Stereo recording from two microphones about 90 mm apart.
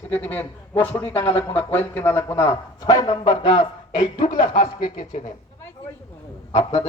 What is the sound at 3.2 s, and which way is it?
A man's voice, 75° left (ahead or behind).